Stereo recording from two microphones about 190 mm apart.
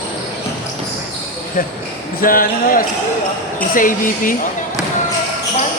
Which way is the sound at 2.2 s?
45° left (ahead or behind).